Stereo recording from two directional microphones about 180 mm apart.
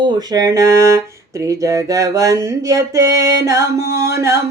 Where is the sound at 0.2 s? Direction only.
20° right (ahead or behind).